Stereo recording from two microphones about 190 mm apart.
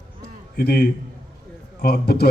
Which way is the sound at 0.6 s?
55° left (ahead or behind).